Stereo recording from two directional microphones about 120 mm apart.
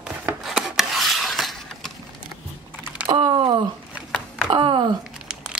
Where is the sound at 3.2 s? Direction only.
50° right (ahead or behind).